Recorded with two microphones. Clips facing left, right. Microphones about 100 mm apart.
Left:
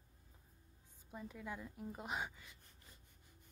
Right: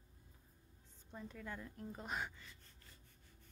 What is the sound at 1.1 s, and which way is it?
Speech, 10° left (ahead or behind).